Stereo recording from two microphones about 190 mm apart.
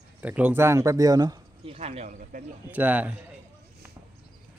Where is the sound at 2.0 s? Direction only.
45° right (ahead or behind).